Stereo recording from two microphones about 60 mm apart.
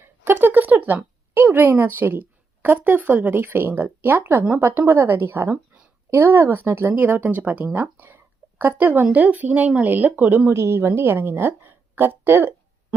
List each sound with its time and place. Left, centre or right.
0.0 s a sound: right
1.5 s a woman's voice: right
6.7 s a woman's voice: right
6.9 s speech: right
10.5 s a woman's voice: right